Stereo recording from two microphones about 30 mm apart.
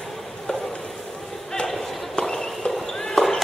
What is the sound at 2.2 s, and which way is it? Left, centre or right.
Walk, centre.